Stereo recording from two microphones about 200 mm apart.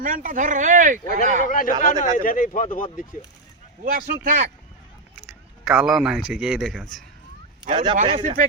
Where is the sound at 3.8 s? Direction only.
45° right (ahead or behind).